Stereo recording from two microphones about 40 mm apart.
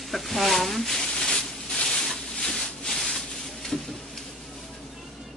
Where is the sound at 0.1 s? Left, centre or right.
Centre.